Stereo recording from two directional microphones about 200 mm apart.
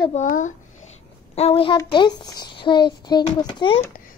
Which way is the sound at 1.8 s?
20° left (ahead or behind).